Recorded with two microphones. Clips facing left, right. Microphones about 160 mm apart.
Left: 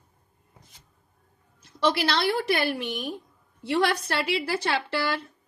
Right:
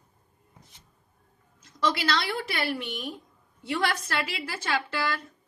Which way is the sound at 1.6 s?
30° left (ahead or behind).